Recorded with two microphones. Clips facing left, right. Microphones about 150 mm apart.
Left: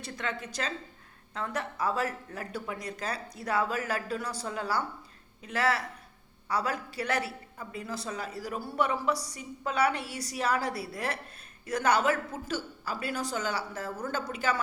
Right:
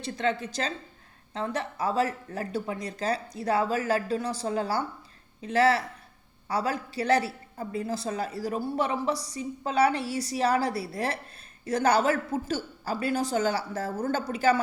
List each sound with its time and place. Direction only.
0.0 s a woman's voice: 30° right (ahead or behind)